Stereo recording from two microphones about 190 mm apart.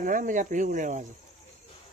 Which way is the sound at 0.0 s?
45° right (ahead or behind).